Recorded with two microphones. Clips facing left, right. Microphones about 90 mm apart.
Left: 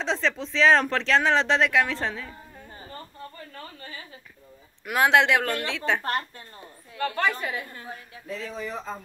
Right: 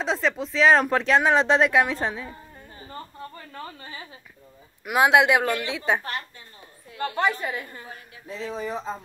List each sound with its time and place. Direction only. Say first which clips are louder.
0.0 s speech: right 2 dB; 10° right (ahead or behind)
3.5 s speech: right 3 dB; 25° right (ahead or behind)
4.8 s speech: right 2 dB; 10° right (ahead or behind)
7.3 s a woman's voice: right 1 dB; centre (ahead or behind)
8.3 s speech: right 3 dB; 30° right (ahead or behind)